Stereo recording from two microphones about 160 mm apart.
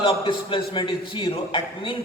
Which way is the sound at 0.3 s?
35° left (ahead or behind).